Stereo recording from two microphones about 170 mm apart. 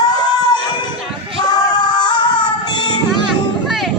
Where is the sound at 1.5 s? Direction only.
25° left (ahead or behind).